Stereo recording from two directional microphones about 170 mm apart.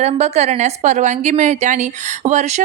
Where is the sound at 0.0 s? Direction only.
40° right (ahead or behind).